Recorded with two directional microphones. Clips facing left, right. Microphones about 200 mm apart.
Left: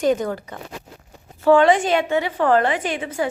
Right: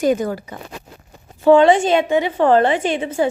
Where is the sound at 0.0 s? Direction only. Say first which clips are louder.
Right 2 dB; 10° right (ahead or behind).